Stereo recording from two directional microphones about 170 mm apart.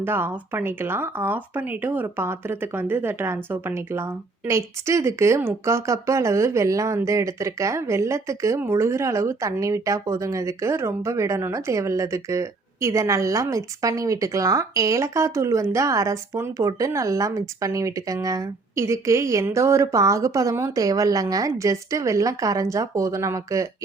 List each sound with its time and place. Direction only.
0.0 s speech: 15° right (ahead or behind)